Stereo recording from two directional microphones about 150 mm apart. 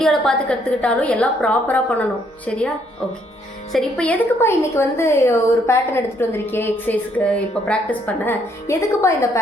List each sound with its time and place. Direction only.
0.0 s a woman's voice: 5° left (ahead or behind); by 9.4 s 20° left (ahead or behind)